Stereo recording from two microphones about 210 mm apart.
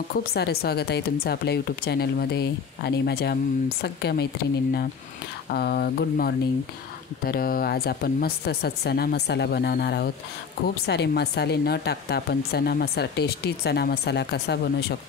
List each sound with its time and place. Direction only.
0.3 s speech: 50° left (ahead or behind)
5.5 s speech: 50° left (ahead or behind)